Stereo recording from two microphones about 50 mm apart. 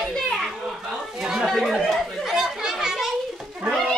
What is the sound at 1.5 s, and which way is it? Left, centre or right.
Children playing, centre.